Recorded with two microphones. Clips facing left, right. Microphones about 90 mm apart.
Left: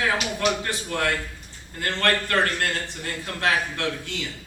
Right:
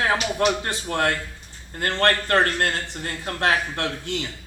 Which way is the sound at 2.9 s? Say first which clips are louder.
Right 2 dB; 50° right (ahead or behind).